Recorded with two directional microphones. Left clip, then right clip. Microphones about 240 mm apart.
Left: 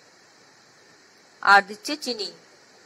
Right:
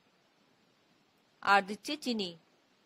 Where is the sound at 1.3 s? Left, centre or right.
Right.